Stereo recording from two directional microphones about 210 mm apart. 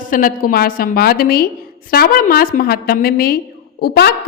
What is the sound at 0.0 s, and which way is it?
A woman's voice, 40° left (ahead or behind).